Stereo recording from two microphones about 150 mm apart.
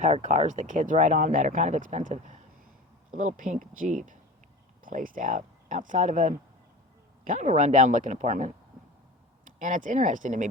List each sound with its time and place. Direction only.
0.0 s speech: 55° right (ahead or behind)